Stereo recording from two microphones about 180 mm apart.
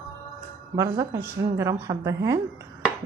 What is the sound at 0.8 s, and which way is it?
A woman's voice, 20° right (ahead or behind).